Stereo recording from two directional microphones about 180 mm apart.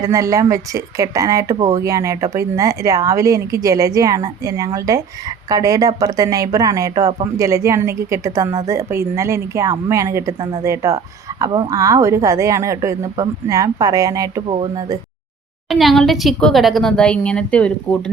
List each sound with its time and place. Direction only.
0.0 s speech: 20° right (ahead or behind)
15.7 s a woman's voice: centre (ahead or behind)